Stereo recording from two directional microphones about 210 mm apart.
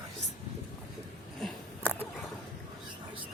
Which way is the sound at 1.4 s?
5° left (ahead or behind).